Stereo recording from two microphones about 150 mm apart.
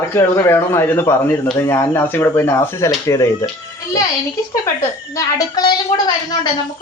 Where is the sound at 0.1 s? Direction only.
15° left (ahead or behind).